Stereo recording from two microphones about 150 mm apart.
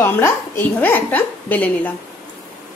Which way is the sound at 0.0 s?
15° left (ahead or behind).